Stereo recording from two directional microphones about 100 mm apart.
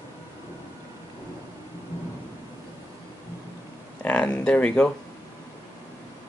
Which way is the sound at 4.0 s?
15° left (ahead or behind).